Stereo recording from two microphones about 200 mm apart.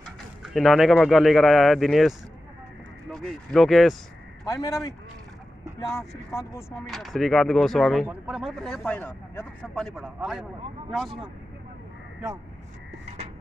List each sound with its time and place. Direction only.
0.4 s speech: centre (ahead or behind)
4.5 s speech: 15° left (ahead or behind)
5.9 s speech: 15° left (ahead or behind)
6.9 s speech: centre (ahead or behind)